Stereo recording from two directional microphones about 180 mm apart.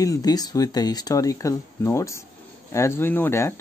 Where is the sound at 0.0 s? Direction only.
20° left (ahead or behind).